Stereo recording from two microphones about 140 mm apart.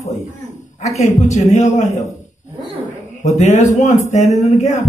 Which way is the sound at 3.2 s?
60° left (ahead or behind).